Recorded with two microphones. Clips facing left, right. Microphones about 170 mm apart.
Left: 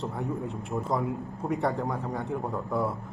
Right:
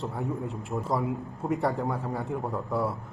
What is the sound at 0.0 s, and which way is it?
A man's voice, centre (ahead or behind).